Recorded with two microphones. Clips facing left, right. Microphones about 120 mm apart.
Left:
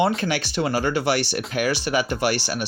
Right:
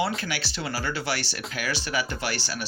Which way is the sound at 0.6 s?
45° left (ahead or behind).